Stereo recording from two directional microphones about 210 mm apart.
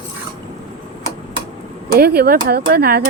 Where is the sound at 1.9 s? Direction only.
50° right (ahead or behind).